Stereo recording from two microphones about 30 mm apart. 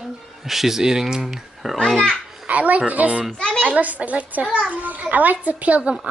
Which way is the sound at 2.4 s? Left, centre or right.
Right.